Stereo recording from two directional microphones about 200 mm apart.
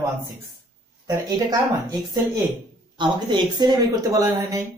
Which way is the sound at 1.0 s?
15° right (ahead or behind).